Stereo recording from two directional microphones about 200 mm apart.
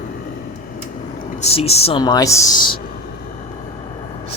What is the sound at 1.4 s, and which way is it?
Speech, 30° left (ahead or behind).